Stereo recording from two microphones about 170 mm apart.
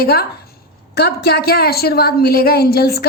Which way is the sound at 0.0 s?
65° left (ahead or behind).